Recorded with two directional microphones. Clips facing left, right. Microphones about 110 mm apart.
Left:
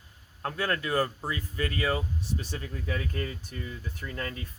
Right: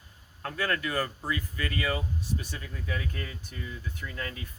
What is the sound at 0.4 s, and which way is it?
Speech, 30° left (ahead or behind).